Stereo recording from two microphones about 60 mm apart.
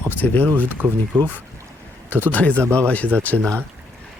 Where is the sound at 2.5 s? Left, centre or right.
Right.